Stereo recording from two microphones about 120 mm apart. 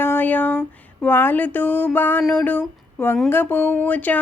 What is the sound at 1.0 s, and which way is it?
Speech, 15° left (ahead or behind).